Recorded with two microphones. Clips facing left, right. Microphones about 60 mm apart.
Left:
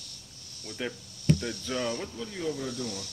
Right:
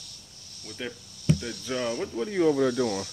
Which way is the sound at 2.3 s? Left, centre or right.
Right.